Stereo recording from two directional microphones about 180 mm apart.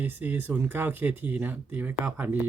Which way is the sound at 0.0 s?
10° right (ahead or behind).